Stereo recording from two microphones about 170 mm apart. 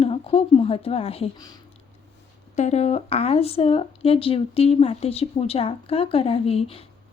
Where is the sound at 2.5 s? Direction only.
40° left (ahead or behind).